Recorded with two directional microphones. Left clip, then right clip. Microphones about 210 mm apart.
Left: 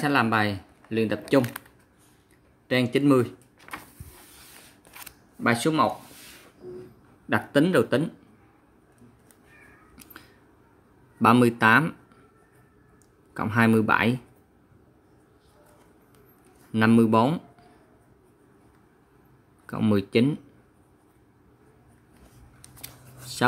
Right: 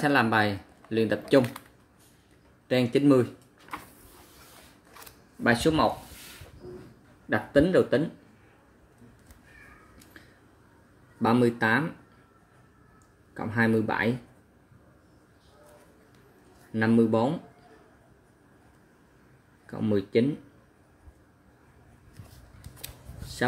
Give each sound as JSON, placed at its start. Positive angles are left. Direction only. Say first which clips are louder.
{"t": 0.0, "sound": "speech", "louder": "even", "side_deg": 15}
{"t": 2.7, "sound": "speech", "louder": "left 1 dB", "side_deg": 15}
{"t": 5.4, "sound": "speech", "louder": "left 1 dB", "side_deg": 20}
{"t": 7.2, "sound": "speech", "louder": "even", "side_deg": 35}
{"t": 11.1, "sound": "speech", "louder": "left 5 dB", "side_deg": 40}
{"t": 13.4, "sound": "speech", "louder": "left 4 dB", "side_deg": 40}
{"t": 16.7, "sound": "speech", "louder": "left 4 dB", "side_deg": 40}
{"t": 19.6, "sound": "speech", "louder": "left 3 dB", "side_deg": 40}